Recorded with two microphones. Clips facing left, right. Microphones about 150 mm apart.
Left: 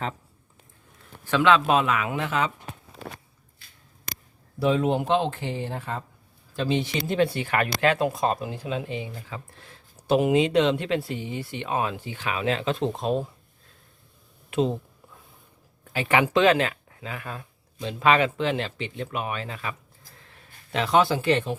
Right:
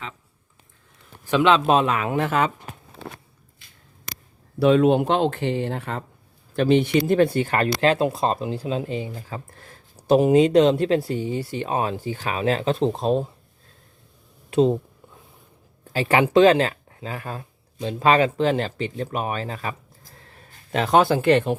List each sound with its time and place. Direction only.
1.2 s speech: 15° right (ahead or behind); by 2.5 s 50° right (ahead or behind)
4.6 s speech: 75° right (ahead or behind)
6.6 s speech: 55° right (ahead or behind); by 13.2 s 35° right (ahead or behind)
15.9 s speech: 35° right (ahead or behind); by 21.5 s 60° right (ahead or behind)